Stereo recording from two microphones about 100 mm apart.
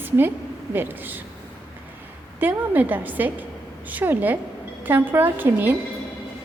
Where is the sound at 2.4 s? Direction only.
15° right (ahead or behind).